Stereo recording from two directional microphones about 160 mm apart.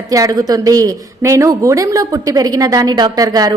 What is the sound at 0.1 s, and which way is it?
A woman's voice, 20° right (ahead or behind).